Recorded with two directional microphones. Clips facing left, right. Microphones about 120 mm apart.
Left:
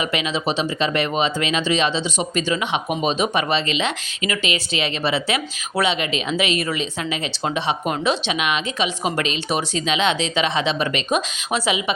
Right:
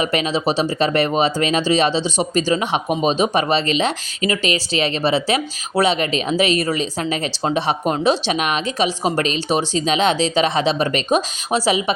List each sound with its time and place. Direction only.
0.0 s speech: 40° right (ahead or behind)